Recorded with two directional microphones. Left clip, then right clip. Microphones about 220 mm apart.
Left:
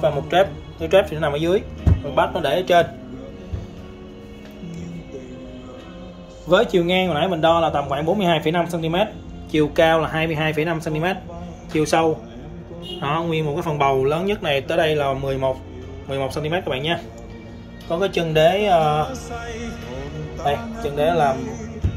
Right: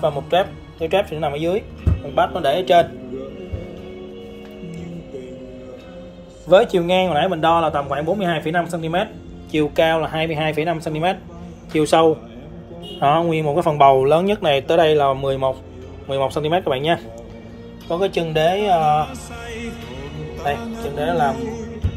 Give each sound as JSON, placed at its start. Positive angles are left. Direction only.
{"t": 0.8, "sound": "a man's voice", "side_deg": 0}
{"t": 6.5, "sound": "a man's voice", "side_deg": -10}
{"t": 17.8, "sound": "speech", "side_deg": -5}
{"t": 19.3, "sound": "music", "side_deg": -30}